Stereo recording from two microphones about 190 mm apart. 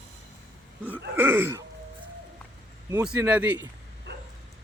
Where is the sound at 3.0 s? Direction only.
5° right (ahead or behind).